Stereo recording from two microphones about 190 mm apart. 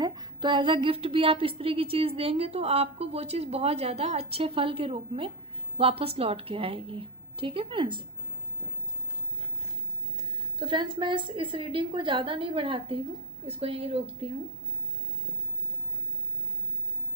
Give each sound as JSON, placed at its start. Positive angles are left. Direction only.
{"t": 0.0, "sound": "a woman's voice", "side_deg": -25}
{"t": 10.6, "sound": "a woman's voice", "side_deg": -25}